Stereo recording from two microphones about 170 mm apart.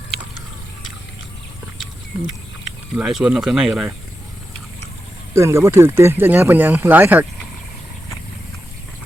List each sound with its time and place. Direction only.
2.9 s speech: 5° right (ahead or behind)
5.3 s speech: 15° right (ahead or behind)